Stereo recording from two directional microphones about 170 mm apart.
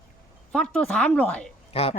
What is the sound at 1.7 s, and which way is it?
Speech, 35° left (ahead or behind).